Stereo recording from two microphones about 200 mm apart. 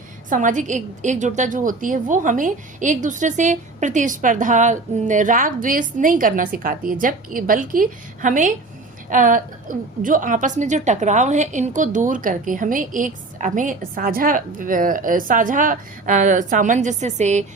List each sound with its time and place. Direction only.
0.3 s a woman's voice: 40° right (ahead or behind)